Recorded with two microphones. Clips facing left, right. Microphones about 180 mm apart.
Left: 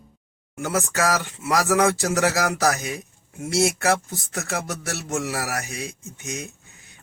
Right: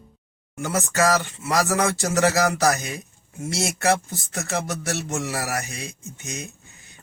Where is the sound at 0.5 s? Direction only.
10° left (ahead or behind).